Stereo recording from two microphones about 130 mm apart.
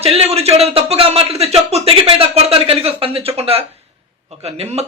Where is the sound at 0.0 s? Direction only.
50° right (ahead or behind).